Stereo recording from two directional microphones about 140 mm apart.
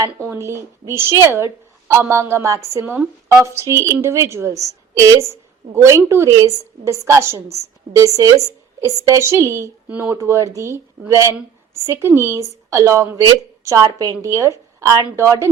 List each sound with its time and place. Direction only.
0.0 s a woman's voice: 20° right (ahead or behind)